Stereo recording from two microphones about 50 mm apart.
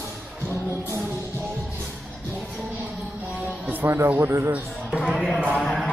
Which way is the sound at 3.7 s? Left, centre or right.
Right.